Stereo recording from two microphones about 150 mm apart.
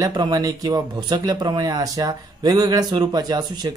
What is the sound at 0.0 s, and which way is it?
Speech, 25° right (ahead or behind).